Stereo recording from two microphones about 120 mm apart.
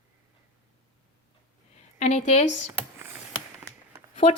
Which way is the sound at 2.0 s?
80° left.